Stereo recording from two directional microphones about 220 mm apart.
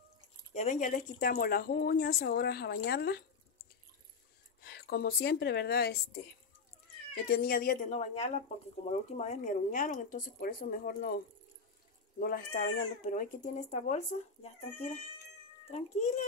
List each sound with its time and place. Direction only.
0.6 s speech: 35° left (ahead or behind)
4.6 s a woman's voice: 45° left (ahead or behind)
7.2 s speech: 45° left (ahead or behind)
12.2 s speech: 40° left (ahead or behind)